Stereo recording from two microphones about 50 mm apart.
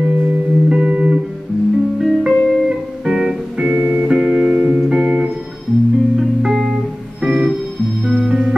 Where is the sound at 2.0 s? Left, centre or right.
Centre.